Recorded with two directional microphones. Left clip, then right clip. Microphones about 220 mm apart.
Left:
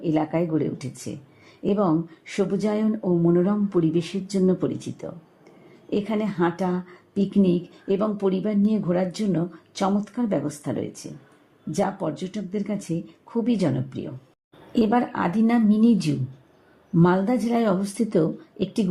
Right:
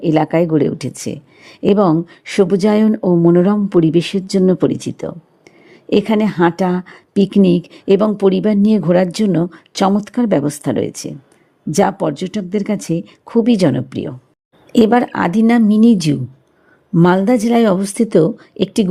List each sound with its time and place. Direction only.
0.0 s a woman's voice: 35° right (ahead or behind)